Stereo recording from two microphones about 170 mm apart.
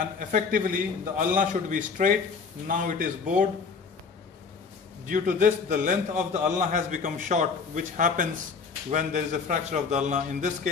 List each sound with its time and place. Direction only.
0.0 s a man's voice: 50° right (ahead or behind)
5.0 s a man's voice: 50° right (ahead or behind)